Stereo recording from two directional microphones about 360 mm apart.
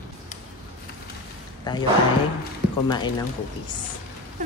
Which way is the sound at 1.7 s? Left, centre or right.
Centre.